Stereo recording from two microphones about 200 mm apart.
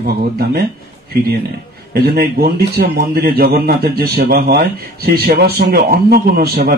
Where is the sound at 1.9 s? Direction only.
50° right (ahead or behind).